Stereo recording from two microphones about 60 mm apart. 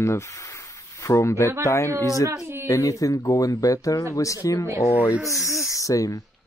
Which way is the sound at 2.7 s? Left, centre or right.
Left.